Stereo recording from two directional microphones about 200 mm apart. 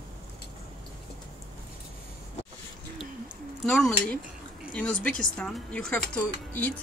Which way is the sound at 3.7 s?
5° left (ahead or behind).